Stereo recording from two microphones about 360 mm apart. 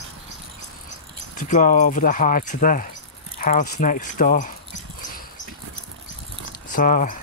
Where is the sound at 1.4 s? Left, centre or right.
Left.